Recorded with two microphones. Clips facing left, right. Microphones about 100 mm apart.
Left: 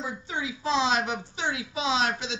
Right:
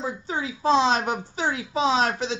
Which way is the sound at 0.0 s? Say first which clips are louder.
Right 4 dB; 40° right (ahead or behind).